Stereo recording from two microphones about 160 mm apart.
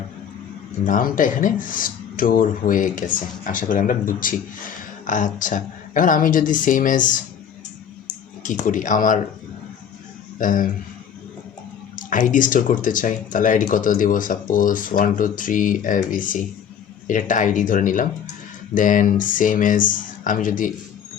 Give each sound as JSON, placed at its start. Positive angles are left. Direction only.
{"t": 0.9, "sound": "speech", "side_deg": 60}
{"t": 8.4, "sound": "speech", "side_deg": 55}
{"t": 10.3, "sound": "speech", "side_deg": 55}
{"t": 11.9, "sound": "speech", "side_deg": 55}